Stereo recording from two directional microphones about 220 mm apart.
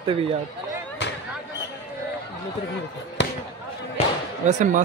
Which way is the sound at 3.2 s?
55° left (ahead or behind).